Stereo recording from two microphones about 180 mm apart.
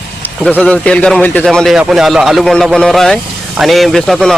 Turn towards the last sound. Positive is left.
turn(degrees=0)  # may be behind; listen again after turning